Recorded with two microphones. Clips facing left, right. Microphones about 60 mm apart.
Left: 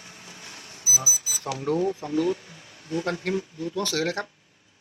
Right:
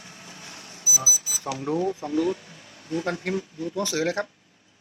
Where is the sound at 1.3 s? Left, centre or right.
Centre.